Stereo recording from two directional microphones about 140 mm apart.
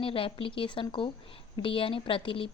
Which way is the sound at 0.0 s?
40° left (ahead or behind).